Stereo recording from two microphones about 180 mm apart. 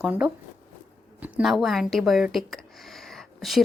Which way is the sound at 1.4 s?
Centre (ahead or behind).